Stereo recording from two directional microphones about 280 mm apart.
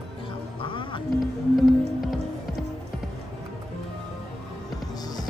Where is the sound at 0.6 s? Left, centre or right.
Centre.